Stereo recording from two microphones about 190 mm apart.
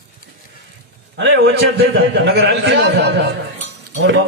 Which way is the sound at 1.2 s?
70° right (ahead or behind).